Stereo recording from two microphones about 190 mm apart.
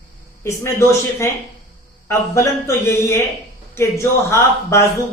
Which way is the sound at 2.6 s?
15° left (ahead or behind).